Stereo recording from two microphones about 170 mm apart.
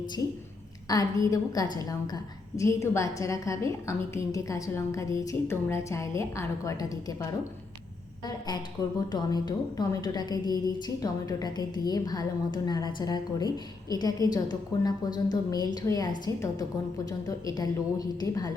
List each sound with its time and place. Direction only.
0.9 s a woman's voice: 20° left (ahead or behind)
9.0 s a woman's voice: 25° left (ahead or behind)